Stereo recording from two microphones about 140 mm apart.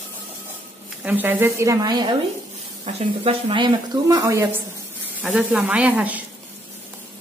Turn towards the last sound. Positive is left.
turn(degrees=-10)  # may be behind; listen again after turning